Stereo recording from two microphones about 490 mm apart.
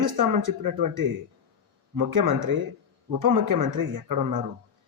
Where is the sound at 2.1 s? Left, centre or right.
Right.